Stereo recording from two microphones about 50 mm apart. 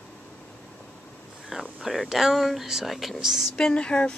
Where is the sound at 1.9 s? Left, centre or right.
Centre.